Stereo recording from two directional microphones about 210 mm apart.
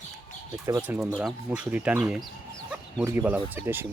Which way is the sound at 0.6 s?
15° right (ahead or behind).